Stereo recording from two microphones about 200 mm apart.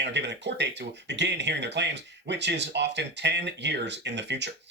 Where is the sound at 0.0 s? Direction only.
60° right (ahead or behind).